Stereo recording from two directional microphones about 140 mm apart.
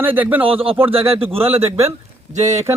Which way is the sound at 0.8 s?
45° right (ahead or behind).